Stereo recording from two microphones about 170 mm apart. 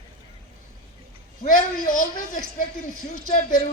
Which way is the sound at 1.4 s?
50° left (ahead or behind).